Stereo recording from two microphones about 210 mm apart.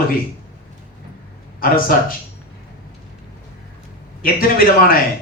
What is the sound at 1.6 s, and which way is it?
Speech, 45° left (ahead or behind).